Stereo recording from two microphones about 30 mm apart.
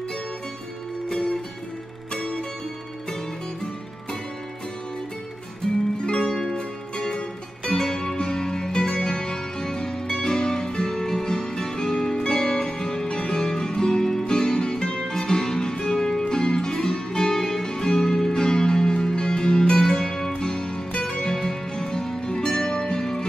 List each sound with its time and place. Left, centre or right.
2.1 s music: left
5.9 s zither: left
6.5 s music: left